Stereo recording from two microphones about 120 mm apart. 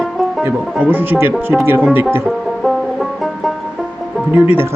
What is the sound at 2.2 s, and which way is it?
Banjo, centre (ahead or behind).